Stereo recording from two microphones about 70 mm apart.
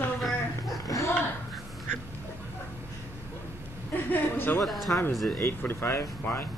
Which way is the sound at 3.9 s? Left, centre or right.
Left.